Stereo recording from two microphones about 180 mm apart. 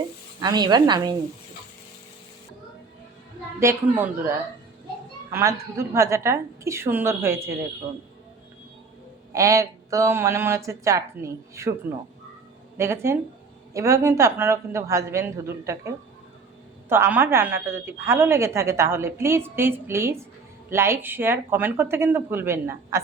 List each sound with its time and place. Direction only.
0.3 s a woman's voice: 20° right (ahead or behind)
3.6 s a woman's voice: 15° right (ahead or behind)
5.3 s a woman's voice: 15° right (ahead or behind)
9.3 s a woman's voice: 15° right (ahead or behind)
12.7 s a woman's voice: 15° right (ahead or behind)
16.9 s a woman's voice: 10° right (ahead or behind)